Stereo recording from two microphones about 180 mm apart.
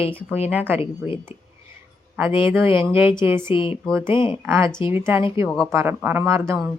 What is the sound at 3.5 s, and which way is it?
Speech, 30° left (ahead or behind).